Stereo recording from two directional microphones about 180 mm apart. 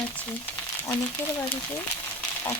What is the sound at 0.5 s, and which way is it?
Speech, 20° left (ahead or behind).